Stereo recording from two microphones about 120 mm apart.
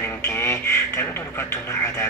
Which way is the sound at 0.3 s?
20° left (ahead or behind).